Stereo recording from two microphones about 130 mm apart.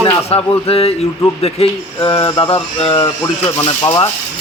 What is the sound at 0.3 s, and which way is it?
A man's voice, 50° left (ahead or behind).